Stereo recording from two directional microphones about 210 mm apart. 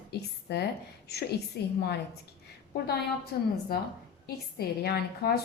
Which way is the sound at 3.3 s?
50° left (ahead or behind).